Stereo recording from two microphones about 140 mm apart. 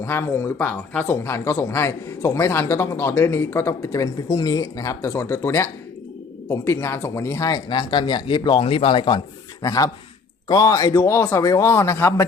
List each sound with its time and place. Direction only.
0.0 s speech: 15° left (ahead or behind)